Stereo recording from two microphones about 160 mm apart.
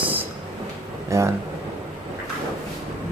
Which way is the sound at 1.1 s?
20° right (ahead or behind).